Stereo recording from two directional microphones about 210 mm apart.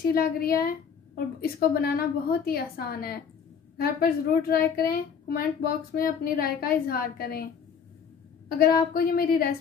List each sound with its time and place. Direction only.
0.0 s a woman's voice: 45° left (ahead or behind)
8.5 s a woman's voice: 45° left (ahead or behind)